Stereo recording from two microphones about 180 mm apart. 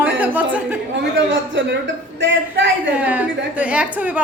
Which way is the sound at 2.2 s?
85° right.